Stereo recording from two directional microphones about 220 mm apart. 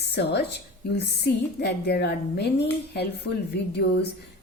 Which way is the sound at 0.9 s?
50° left (ahead or behind).